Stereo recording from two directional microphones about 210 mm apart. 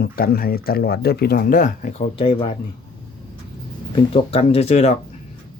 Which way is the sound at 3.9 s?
25° left (ahead or behind).